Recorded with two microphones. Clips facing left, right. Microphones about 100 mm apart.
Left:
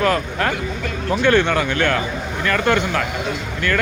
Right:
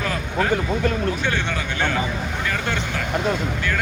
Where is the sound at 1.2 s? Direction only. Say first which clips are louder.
Left 9 dB; 55° left (ahead or behind).